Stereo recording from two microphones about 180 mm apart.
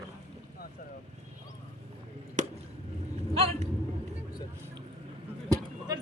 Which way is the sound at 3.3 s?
35° right (ahead or behind).